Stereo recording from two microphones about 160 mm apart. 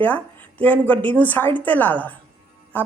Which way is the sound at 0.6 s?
10° left (ahead or behind).